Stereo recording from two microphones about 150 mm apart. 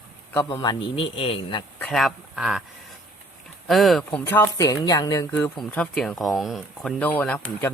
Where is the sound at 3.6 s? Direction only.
Centre (ahead or behind); by 5.3 s 25° left (ahead or behind).